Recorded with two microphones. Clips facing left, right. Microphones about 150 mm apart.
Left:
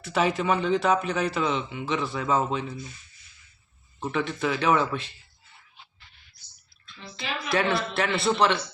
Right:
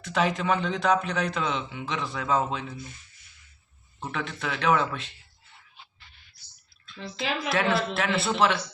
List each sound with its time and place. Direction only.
0.0 s speech: centre (ahead or behind)
4.0 s speech: centre (ahead or behind)
6.9 s speech: 90° right
7.5 s speech: centre (ahead or behind)